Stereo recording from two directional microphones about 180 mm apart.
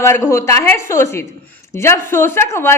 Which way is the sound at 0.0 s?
15° left (ahead or behind).